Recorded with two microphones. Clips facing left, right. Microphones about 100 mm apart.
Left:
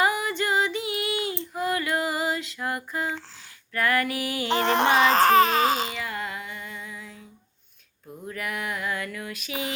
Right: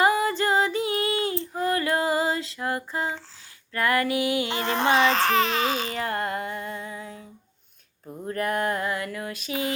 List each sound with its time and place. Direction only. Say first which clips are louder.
0.0 s female singing: right 3 dB; 35° right (ahead or behind)
3.7 s music: right 1 dB; 25° right (ahead or behind)
4.6 s a sound: left 2 dB; 70° left (ahead or behind)
4.9 s baby cry: left 5 dB; 40° left (ahead or behind)
6.0 s music: right 5 dB; 50° right (ahead or behind)
8.3 s music: right 6 dB; 45° right (ahead or behind)
8.9 s music: right 2 dB; 25° right (ahead or behind)
9.5 s a sound: right 4 dB; 20° left (ahead or behind)